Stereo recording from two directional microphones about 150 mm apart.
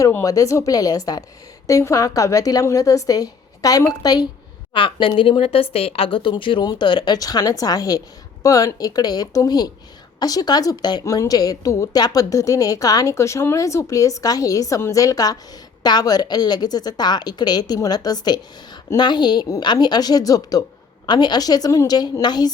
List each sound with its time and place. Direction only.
0.0 s a woman's voice: 20° left (ahead or behind)